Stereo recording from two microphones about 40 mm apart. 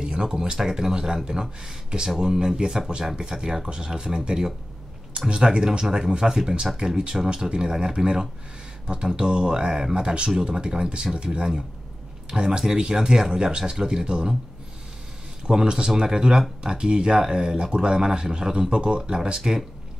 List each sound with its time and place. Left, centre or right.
0.0 s a sound: centre
0.4 s speech: centre
15.4 s speech: right